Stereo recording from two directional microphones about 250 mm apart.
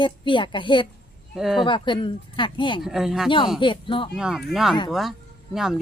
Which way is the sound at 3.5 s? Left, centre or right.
Centre.